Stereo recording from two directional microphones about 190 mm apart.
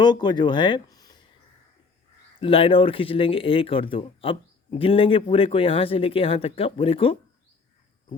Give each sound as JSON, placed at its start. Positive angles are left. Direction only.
{"t": 0.0, "sound": "speech", "side_deg": 25}
{"t": 2.4, "sound": "speech", "side_deg": 30}